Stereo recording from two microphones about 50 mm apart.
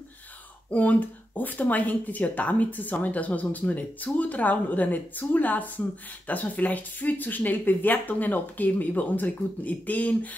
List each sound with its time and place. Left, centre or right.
0.7 s speech: left